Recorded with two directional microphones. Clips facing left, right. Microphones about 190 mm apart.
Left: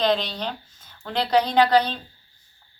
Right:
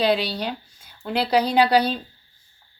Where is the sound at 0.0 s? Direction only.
10° right (ahead or behind).